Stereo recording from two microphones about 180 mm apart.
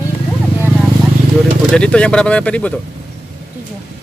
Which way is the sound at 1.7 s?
5° left (ahead or behind).